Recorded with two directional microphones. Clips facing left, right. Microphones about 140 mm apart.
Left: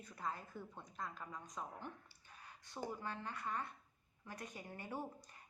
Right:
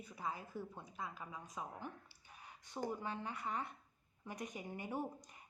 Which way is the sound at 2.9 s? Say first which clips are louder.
Right 2 dB; 15° right (ahead or behind).